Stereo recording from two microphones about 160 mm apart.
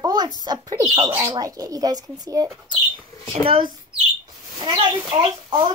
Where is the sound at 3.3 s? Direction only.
35° right (ahead or behind).